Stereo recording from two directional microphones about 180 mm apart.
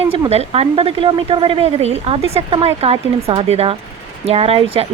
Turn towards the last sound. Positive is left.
turn(degrees=-30)  # may be behind; listen again after turning